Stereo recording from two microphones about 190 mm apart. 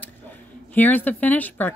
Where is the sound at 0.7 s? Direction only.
10° left (ahead or behind).